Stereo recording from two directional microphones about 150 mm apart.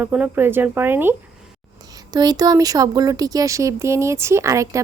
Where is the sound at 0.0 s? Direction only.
10° right (ahead or behind).